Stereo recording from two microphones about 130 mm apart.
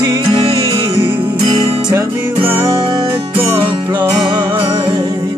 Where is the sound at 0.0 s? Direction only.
25° right (ahead or behind).